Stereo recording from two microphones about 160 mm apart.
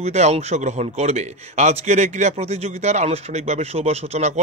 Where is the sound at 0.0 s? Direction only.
45° right (ahead or behind).